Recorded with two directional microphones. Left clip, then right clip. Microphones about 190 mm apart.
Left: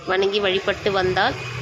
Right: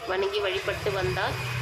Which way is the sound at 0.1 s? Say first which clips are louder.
Left 7 dB; 25° left (ahead or behind).